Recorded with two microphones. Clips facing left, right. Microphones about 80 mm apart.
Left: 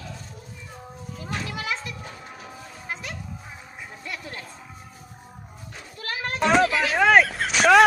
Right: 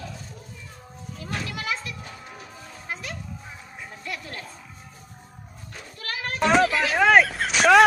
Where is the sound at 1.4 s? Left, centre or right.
Left.